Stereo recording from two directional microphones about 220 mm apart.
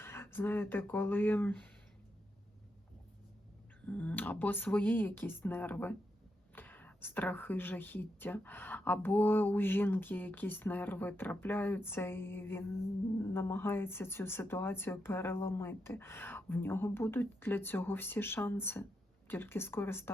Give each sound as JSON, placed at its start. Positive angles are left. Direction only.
{"t": 0.0, "sound": "speech", "side_deg": 10}
{"t": 3.8, "sound": "speech", "side_deg": 5}